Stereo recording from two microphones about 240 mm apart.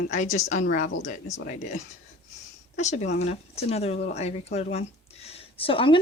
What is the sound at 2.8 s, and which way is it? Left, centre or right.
Speech, left.